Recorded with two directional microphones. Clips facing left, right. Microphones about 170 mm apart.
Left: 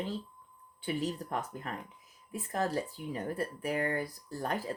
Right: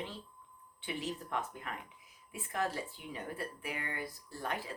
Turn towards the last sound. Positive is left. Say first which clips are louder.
# left 5 dB
turn(degrees=40)  # may be behind; listen again after turning